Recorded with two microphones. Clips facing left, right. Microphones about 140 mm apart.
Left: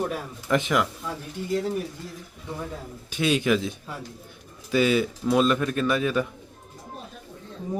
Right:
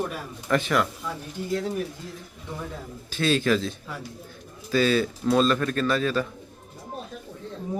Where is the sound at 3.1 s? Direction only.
15° left (ahead or behind).